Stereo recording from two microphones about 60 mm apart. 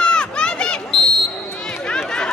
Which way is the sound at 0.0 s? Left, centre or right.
Centre.